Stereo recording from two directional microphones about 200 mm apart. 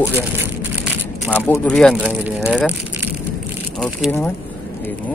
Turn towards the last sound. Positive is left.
turn(degrees=0)  # may be behind; listen again after turning